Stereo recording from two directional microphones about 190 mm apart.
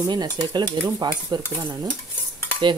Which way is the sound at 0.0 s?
20° right (ahead or behind).